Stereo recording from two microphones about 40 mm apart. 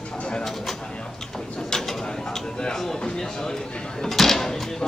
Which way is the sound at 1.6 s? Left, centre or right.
Centre.